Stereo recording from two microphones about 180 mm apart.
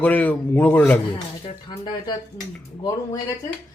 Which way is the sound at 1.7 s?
25° left (ahead or behind).